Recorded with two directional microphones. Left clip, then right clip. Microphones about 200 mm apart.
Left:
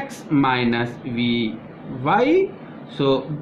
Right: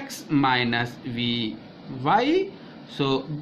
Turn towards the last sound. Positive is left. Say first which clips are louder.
# left 5 dB
turn(degrees=-45)  # may be behind; listen again after turning